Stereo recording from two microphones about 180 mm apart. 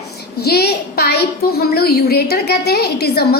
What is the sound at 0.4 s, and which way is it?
A child's voice, 60° left (ahead or behind).